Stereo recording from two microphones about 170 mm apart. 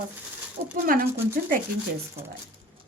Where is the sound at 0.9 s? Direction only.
55° right (ahead or behind).